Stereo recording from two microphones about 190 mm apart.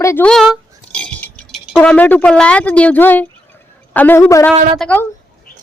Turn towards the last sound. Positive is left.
turn(degrees=5)  # may be behind; listen again after turning